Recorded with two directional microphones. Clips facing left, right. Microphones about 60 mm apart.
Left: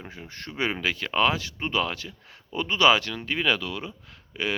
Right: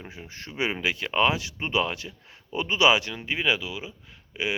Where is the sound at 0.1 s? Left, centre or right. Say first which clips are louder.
Left 1 dB; centre.